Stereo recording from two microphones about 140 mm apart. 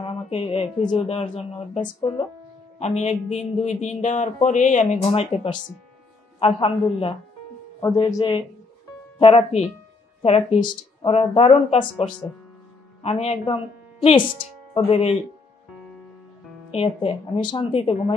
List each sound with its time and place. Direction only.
0.0 s speech: 45° left (ahead or behind)
2.8 s a man's voice: 50° left (ahead or behind); by 8.5 s 35° left (ahead or behind)
9.2 s speech: 45° left (ahead or behind)
10.6 s speech: 35° left (ahead or behind)
11.1 s speech: 45° left (ahead or behind)
13.0 s speech: 45° left (ahead or behind)
16.7 s speech: 40° left (ahead or behind)